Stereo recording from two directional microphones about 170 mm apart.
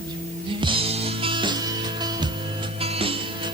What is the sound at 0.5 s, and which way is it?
Music, 30° right (ahead or behind).